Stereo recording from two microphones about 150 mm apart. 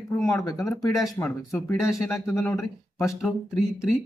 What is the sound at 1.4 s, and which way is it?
Speech, 20° left (ahead or behind).